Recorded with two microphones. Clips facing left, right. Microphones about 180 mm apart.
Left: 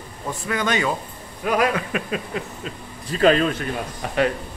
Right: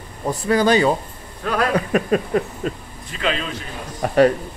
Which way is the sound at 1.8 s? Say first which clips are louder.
Right 7 dB; 40° right (ahead or behind).